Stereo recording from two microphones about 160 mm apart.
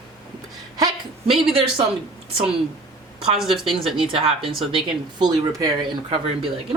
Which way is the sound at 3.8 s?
35° right (ahead or behind).